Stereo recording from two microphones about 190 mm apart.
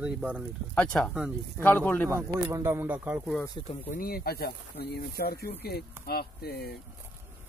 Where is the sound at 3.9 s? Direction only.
50° left (ahead or behind).